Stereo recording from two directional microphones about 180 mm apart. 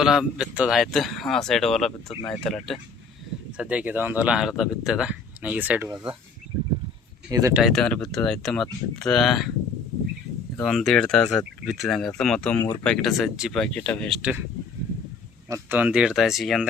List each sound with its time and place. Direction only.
0.0 s speech: 5° right (ahead or behind)
7.3 s speech: 20° right (ahead or behind)
7.5 s speech: centre (ahead or behind)
10.6 s speech: centre (ahead or behind)
14.2 s speech: 5° right (ahead or behind)
15.4 s speech: 15° right (ahead or behind)